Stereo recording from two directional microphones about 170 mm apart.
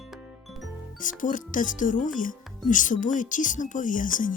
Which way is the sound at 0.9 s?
50° left (ahead or behind).